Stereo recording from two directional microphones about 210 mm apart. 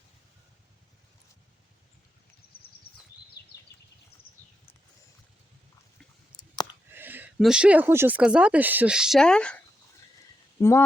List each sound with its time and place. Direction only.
3.4 s a sound: 50° left (ahead or behind)
6.9 s speech: 10° right (ahead or behind)
10.6 s speech: 10° left (ahead or behind)